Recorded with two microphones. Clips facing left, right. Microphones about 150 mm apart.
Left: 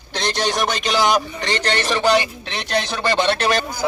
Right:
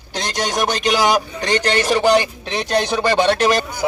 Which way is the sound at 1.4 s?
15° right (ahead or behind).